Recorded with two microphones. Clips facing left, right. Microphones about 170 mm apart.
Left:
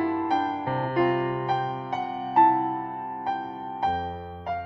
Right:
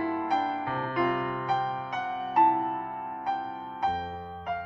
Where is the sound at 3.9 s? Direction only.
35° left (ahead or behind).